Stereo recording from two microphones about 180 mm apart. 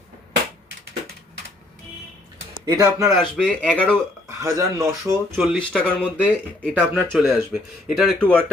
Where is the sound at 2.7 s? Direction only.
20° right (ahead or behind).